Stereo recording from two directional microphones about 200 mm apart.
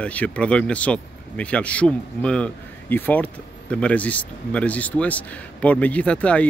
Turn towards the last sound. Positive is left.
turn(degrees=5)  # may be behind; listen again after turning